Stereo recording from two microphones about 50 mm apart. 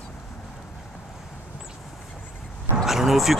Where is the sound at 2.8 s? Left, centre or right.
Centre.